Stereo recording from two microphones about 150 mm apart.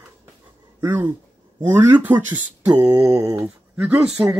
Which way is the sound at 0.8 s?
10° right (ahead or behind).